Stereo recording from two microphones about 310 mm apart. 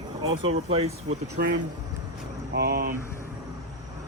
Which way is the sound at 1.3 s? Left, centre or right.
Right.